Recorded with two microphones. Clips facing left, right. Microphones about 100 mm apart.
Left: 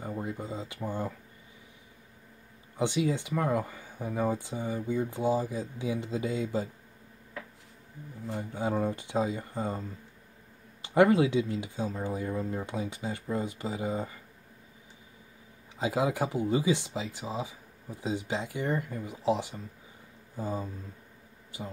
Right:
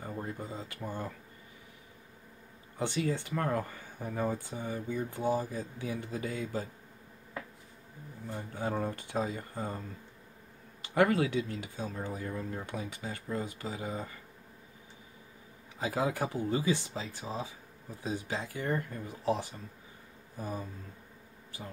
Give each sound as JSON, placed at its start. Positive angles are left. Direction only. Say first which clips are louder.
{"t": 0.1, "sound": "speech", "louder": "left 3 dB", "side_deg": 15}
{"t": 2.8, "sound": "speech", "louder": "left 4 dB", "side_deg": 15}
{"t": 8.3, "sound": "speech", "louder": "left 4 dB", "side_deg": 20}
{"t": 15.8, "sound": "speech", "louder": "left 3 dB", "side_deg": 20}